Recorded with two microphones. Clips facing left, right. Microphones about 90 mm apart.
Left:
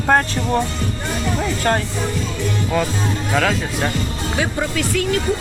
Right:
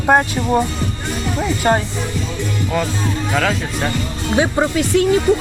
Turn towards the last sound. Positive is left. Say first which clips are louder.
# right 5 dB
turn(degrees=-25)  # may be behind; listen again after turning